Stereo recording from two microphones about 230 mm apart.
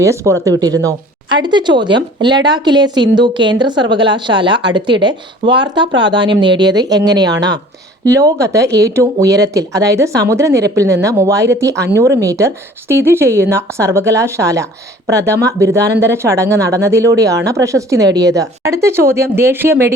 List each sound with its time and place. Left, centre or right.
0.0 s a woman's voice: centre